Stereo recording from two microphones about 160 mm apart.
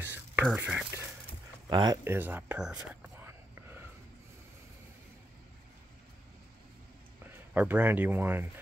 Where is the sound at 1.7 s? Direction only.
25° right (ahead or behind).